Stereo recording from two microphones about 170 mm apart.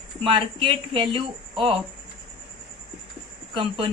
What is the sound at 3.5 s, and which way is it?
Speech, 30° right (ahead or behind).